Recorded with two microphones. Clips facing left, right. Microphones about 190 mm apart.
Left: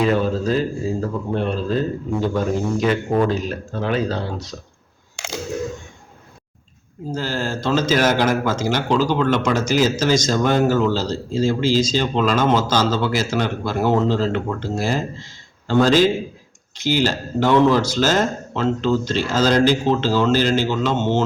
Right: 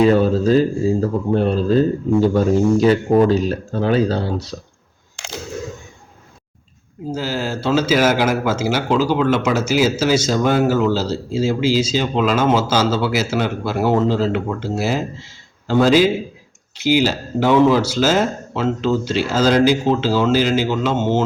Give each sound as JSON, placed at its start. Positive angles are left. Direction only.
{"t": 0.0, "sound": "speech", "side_deg": -35}
{"t": 7.1, "sound": "speech", "side_deg": -10}